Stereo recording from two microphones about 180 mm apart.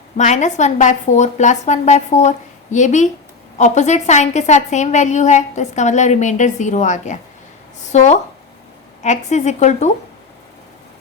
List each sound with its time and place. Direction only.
0.2 s a woman's voice: 40° left (ahead or behind)